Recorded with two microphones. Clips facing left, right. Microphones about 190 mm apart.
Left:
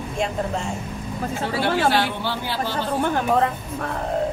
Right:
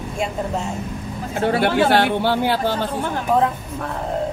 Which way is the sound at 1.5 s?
60° right (ahead or behind).